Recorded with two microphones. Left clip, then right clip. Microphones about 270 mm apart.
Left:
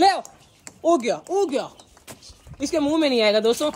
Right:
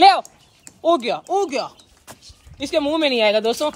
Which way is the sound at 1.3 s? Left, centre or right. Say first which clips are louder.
Right 3 dB; centre.